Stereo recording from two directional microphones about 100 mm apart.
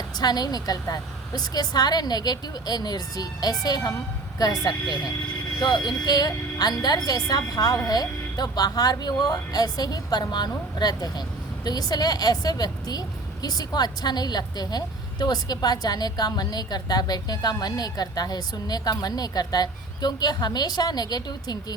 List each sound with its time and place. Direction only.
0.2 s a woman's voice: 40° left (ahead or behind)